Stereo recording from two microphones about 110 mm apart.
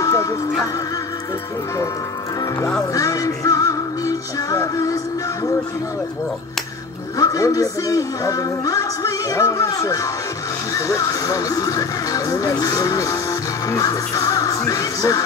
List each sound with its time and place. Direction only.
0.0 s music: 30° left (ahead or behind)
2.9 s music: 30° left (ahead or behind)
7.2 s speech: 30° left (ahead or behind)